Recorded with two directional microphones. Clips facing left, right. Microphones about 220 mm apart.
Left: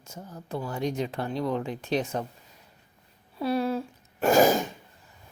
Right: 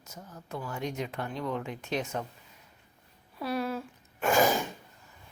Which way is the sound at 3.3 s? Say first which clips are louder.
Left 5 dB; 30° left (ahead or behind).